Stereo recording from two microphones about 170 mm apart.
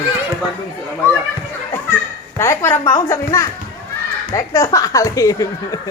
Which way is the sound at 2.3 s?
15° left (ahead or behind).